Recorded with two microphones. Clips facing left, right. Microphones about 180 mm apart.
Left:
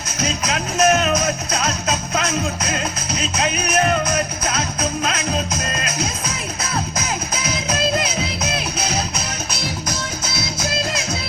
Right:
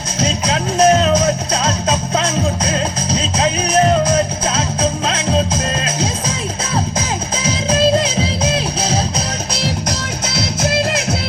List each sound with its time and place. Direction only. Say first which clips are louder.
0.2 s music: right 4 dB; 30° right (ahead or behind)
7.4 s music: right 8 dB; 30° right (ahead or behind)
10.3 s music: right 8 dB; 65° right (ahead or behind)